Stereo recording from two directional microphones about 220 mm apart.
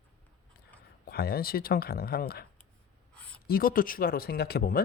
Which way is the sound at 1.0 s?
45° left (ahead or behind).